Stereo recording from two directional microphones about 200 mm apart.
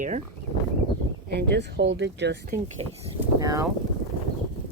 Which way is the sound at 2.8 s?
30° right (ahead or behind).